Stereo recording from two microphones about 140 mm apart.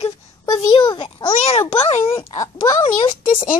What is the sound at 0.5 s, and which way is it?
A child's voice, 30° left (ahead or behind).